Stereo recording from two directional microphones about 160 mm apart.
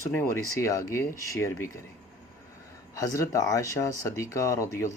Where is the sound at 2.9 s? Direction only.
20° left (ahead or behind).